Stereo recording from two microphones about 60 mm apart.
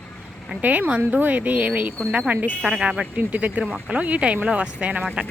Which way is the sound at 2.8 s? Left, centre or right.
Centre.